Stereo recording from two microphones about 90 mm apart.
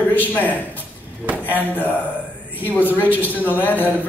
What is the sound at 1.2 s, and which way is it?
Speech, 20° right (ahead or behind).